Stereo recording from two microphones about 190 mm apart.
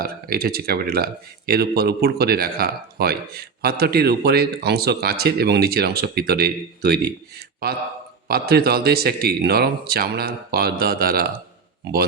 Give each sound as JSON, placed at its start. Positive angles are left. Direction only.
{"t": 0.0, "sound": "speech", "side_deg": -50}